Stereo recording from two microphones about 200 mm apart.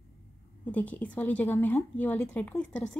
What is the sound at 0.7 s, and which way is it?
A woman's voice, 10° left (ahead or behind).